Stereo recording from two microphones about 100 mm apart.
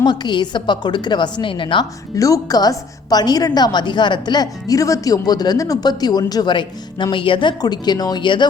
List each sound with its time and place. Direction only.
0.0 s a woman's voice: 45° left (ahead or behind)
2.1 s a woman's voice: 35° left (ahead or behind); by 8.4 s 50° left (ahead or behind)